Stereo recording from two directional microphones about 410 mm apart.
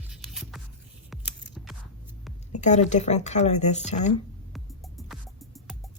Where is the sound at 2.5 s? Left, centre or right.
Centre.